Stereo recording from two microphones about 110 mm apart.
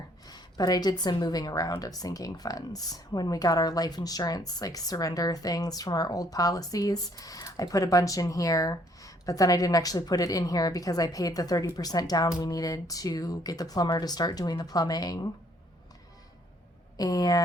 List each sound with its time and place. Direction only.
0.3 s a woman's voice: 40° left (ahead or behind)
17.0 s a woman's voice: 35° left (ahead or behind)